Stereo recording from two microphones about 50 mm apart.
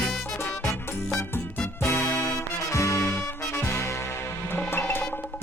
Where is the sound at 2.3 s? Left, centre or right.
Left.